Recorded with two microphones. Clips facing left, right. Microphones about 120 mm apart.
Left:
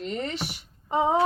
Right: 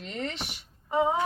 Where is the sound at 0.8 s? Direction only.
25° left (ahead or behind).